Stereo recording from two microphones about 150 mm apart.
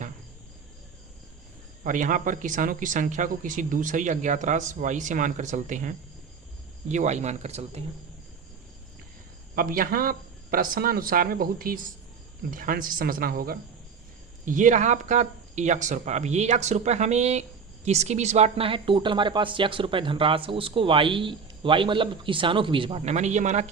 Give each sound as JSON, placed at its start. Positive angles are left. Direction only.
{"t": 1.8, "sound": "speech", "side_deg": -60}
{"t": 9.6, "sound": "speech", "side_deg": -70}
{"t": 14.4, "sound": "a woman's voice", "side_deg": -60}
{"t": 23.0, "sound": "speech", "side_deg": -50}